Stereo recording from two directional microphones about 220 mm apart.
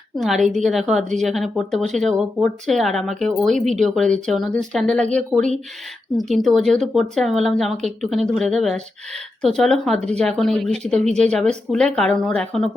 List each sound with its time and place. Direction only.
0.2 s speech: centre (ahead or behind)
6.3 s speech: centre (ahead or behind)
11.0 s speech: 30° right (ahead or behind)
11.3 s speech: 5° left (ahead or behind)